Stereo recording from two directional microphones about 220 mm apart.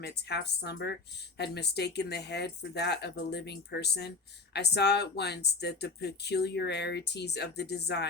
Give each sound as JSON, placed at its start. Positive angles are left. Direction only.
{"t": 0.0, "sound": "speech", "side_deg": 50}